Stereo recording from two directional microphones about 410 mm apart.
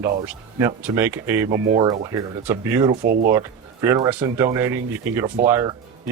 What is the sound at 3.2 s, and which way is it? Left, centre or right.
Speech, centre.